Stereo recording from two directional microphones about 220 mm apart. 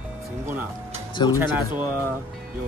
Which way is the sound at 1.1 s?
20° left (ahead or behind).